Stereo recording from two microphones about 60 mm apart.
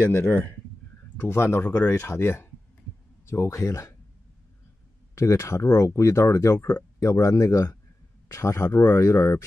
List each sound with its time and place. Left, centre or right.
0.1 s speech: left
3.3 s speech: left
5.1 s speech: left
6.7 s speech: left